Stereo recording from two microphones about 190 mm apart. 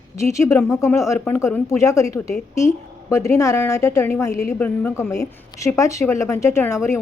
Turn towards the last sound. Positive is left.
turn(degrees=15)  # may be behind; listen again after turning